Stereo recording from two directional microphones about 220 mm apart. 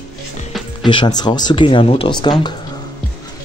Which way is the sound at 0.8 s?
20° left (ahead or behind).